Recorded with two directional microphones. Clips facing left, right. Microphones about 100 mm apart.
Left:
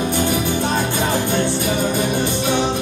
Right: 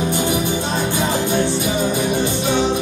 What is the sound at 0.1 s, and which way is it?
Music, 15° right (ahead or behind).